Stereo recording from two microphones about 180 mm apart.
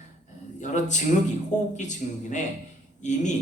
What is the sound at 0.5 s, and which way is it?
A man's voice, 45° left (ahead or behind).